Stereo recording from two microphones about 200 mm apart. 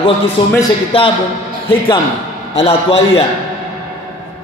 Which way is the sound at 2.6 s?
30° left (ahead or behind).